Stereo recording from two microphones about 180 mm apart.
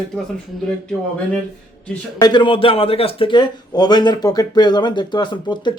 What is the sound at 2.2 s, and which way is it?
A man's voice, 25° left (ahead or behind).